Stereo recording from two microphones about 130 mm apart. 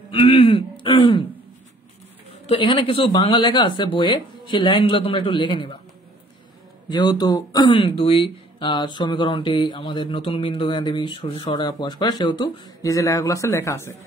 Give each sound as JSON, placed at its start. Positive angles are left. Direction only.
{"t": 0.1, "sound": "speech", "side_deg": 45}
{"t": 2.4, "sound": "speech", "side_deg": 40}
{"t": 6.9, "sound": "speech", "side_deg": 35}